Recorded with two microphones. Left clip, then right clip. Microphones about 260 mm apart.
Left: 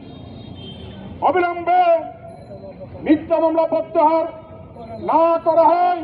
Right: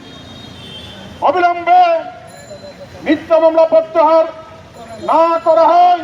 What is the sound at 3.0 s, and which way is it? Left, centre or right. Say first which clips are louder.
A man's voice: right 6 dB; right.